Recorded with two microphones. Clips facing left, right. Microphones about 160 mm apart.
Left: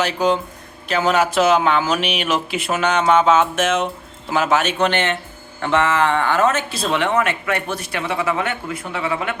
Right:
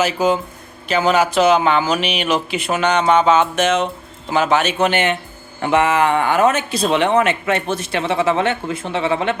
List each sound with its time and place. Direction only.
0.0 s speech: 5° right (ahead or behind); by 9.3 s 25° right (ahead or behind)